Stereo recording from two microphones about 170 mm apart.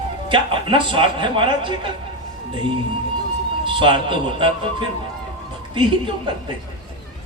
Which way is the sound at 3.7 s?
30° right (ahead or behind).